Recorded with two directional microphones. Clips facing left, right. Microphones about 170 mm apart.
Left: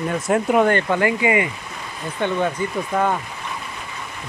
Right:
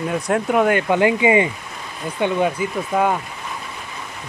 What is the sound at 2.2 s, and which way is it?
Speech, 10° right (ahead or behind).